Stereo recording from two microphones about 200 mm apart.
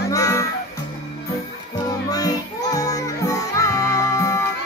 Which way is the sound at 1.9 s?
20° left (ahead or behind).